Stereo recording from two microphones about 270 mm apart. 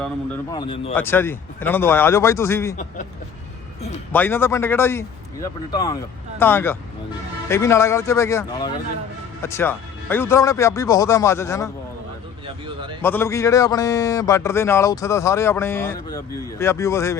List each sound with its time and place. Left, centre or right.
0.5 s a man's voice: centre
4.1 s a man's voice: centre
13.0 s a man's voice: centre